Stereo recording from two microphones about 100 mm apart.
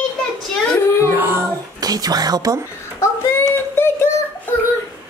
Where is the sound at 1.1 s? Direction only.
20° right (ahead or behind).